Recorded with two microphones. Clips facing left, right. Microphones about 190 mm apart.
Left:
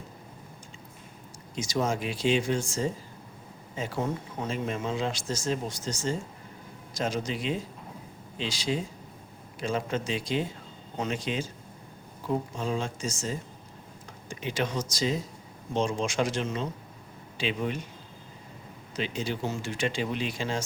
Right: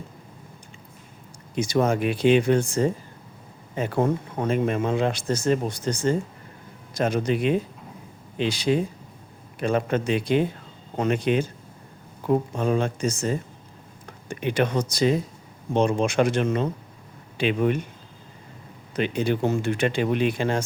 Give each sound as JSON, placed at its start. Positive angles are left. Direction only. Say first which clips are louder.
{"t": 1.5, "sound": "speech", "louder": "right 7 dB", "side_deg": -60}
{"t": 18.9, "sound": "speech", "louder": "right 8 dB", "side_deg": -60}